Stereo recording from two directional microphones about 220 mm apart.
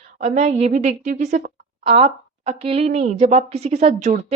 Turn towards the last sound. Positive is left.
turn(degrees=-30)  # may be behind; listen again after turning